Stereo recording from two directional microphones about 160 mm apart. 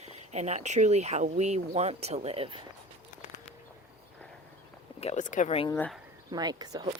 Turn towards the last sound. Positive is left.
turn(degrees=-25)  # may be behind; listen again after turning